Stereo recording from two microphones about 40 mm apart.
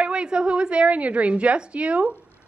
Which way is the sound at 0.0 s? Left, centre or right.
Right.